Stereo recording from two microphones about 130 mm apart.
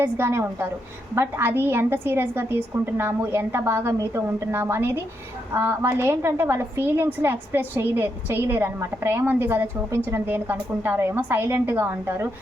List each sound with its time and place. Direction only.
0.0 s a woman's voice: 20° right (ahead or behind)